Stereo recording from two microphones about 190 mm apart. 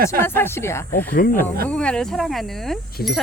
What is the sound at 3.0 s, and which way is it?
Speech, 55° left (ahead or behind).